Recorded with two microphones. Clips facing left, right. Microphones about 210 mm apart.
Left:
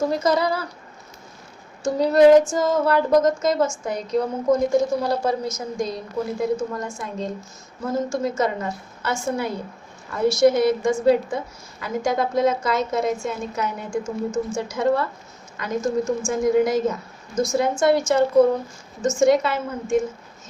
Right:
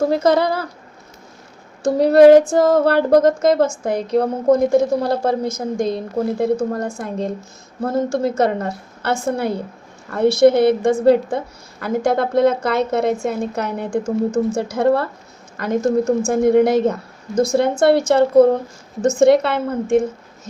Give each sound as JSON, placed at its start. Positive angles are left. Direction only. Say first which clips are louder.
{"t": 0.2, "sound": "a woman's voice", "louder": "right 5 dB", "side_deg": -55}
{"t": 1.8, "sound": "a woman's voice", "louder": "right 5 dB", "side_deg": -60}